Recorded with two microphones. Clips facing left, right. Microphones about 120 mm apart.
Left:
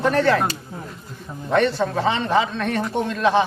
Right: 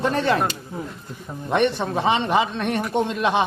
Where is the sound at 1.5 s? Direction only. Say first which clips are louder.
Left 1 dB; 20° right (ahead or behind).